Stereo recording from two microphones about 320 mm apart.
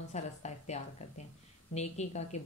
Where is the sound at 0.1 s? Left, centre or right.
Left.